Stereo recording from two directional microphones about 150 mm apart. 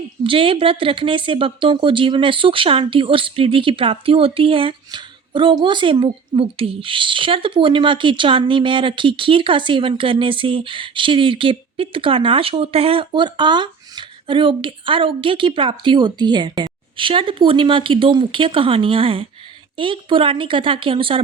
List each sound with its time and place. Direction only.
0.3 s speech: 35° right (ahead or behind)